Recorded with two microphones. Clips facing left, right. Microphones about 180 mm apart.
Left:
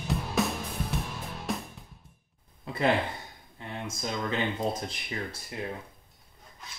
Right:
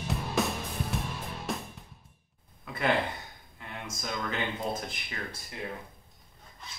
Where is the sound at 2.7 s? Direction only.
30° left (ahead or behind).